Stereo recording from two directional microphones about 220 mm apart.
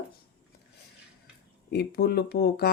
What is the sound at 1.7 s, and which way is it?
Speech, 45° left (ahead or behind).